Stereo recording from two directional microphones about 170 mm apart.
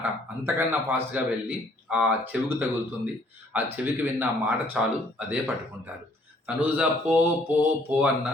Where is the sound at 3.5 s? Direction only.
10° right (ahead or behind).